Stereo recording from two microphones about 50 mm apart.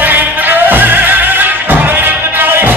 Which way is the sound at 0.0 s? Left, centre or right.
Right.